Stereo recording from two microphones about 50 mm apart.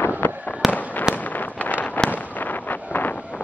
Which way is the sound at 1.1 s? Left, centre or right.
Left.